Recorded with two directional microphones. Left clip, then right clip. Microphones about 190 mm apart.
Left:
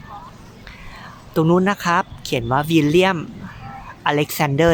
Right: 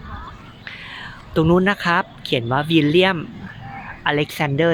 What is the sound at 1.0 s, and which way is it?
Speech, centre (ahead or behind).